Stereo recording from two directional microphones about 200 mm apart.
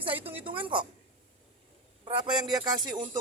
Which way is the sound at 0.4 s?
25° right (ahead or behind).